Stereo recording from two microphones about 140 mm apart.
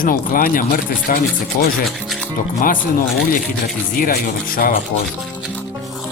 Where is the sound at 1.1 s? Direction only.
70° left (ahead or behind).